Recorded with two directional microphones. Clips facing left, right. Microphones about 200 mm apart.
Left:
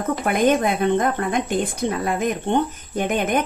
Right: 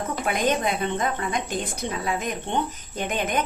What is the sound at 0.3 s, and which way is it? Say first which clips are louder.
A woman's voice: left 6 dB; 50° left (ahead or behind).